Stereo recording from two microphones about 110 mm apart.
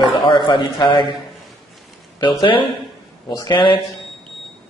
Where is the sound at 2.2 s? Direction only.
45° left (ahead or behind).